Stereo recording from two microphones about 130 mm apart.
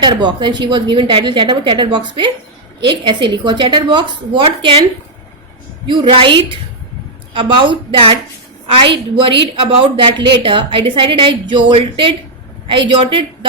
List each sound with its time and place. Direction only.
0.0 s a woman's voice: 35° right (ahead or behind)
5.9 s a woman's voice: 45° right (ahead or behind)